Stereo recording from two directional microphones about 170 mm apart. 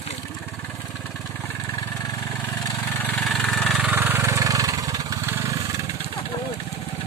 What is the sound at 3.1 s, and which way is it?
Engine, centre (ahead or behind).